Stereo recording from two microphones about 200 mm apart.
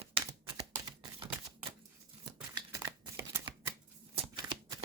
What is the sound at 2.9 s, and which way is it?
Shuffling cards, 20° right (ahead or behind).